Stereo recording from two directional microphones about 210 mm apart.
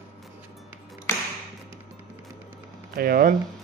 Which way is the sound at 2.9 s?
45° right (ahead or behind).